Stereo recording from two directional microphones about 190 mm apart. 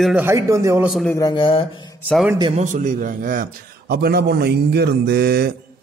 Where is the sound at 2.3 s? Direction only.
25° right (ahead or behind).